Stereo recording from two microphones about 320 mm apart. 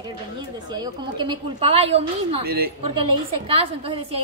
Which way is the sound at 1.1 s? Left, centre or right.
Centre.